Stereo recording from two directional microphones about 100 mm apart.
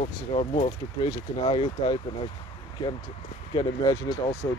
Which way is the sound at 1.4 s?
55° left (ahead or behind).